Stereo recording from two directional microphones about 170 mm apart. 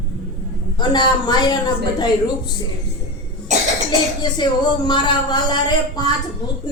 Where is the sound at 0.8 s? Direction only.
25° left (ahead or behind).